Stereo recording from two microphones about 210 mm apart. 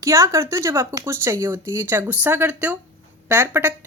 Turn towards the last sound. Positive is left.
turn(degrees=-10)  # may be behind; listen again after turning